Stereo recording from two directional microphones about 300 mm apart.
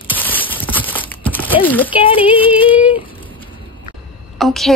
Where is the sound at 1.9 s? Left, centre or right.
Centre.